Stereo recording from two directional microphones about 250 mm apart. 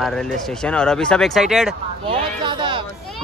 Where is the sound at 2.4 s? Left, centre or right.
Centre.